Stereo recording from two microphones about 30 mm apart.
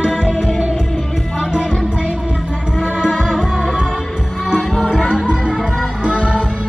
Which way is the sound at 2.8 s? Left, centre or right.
Left.